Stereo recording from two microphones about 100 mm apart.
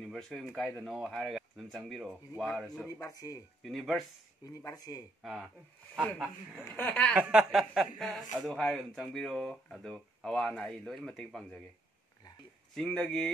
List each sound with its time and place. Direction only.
0.0 s speech: 5° left (ahead or behind)
2.9 s speech: 40° left (ahead or behind)
3.6 s speech: centre (ahead or behind)
4.5 s speech: 35° left (ahead or behind)
5.2 s speech: centre (ahead or behind)
6.7 s speech: 15° left (ahead or behind)
7.2 s a sound: 15° right (ahead or behind)
7.5 s speech: centre (ahead or behind)
12.7 s speech: 5° left (ahead or behind)